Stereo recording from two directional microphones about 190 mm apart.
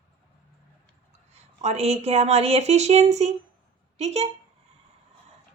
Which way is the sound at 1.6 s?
35° right (ahead or behind).